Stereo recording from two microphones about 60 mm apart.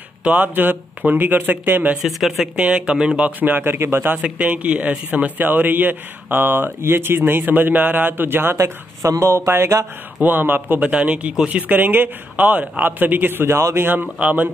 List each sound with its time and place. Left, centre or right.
0.2 s a man's voice: right
2.0 s speech: centre
2.5 s speech: centre
3.2 s a man's voice: right
4.2 s a man's voice: right
8.5 s speech: right
9.3 s speech: right
10.2 s a man's voice: right
10.8 s a man's voice: right